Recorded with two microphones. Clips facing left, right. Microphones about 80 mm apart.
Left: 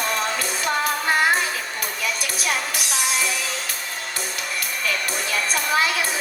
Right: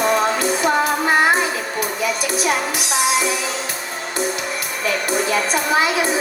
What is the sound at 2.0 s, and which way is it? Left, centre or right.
Music, right.